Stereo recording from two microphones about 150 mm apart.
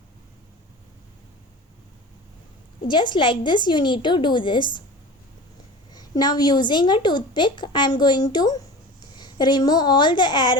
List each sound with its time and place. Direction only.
2.9 s a woman's voice: 30° left (ahead or behind)
5.9 s a woman's voice: 25° left (ahead or behind)